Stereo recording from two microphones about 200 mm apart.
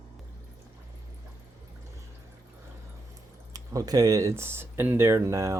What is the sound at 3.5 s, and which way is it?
Speech, 20° right (ahead or behind).